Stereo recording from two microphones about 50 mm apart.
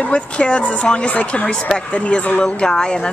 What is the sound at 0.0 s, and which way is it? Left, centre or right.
A woman's voice, left.